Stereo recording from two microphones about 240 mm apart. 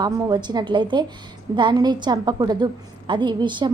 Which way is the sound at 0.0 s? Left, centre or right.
Centre.